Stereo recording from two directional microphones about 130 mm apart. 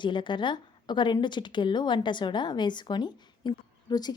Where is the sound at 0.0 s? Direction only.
35° left (ahead or behind).